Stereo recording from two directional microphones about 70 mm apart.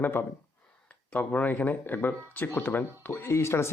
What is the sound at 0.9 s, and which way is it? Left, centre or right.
Speech, centre.